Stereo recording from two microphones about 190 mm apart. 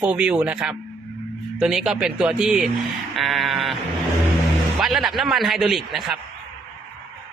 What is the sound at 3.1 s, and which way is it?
Sheep, centre (ahead or behind).